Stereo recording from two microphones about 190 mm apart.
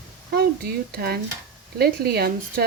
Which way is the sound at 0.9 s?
55° right (ahead or behind).